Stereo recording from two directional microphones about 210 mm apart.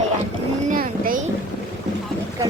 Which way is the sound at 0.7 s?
40° right (ahead or behind).